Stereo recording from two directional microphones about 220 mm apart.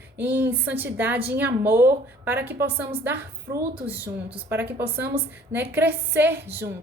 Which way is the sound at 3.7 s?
25° right (ahead or behind).